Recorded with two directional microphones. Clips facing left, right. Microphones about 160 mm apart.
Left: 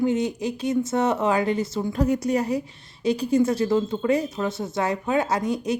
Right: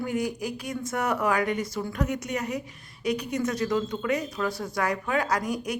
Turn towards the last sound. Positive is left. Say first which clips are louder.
# left 4 dB
turn(degrees=25)  # may be behind; listen again after turning